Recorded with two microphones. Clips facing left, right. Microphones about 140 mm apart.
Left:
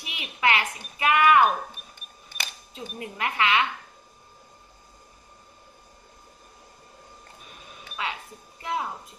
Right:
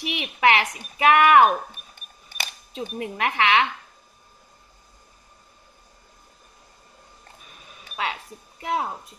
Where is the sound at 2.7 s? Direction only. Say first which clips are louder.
Right 8 dB; 75° right (ahead or behind).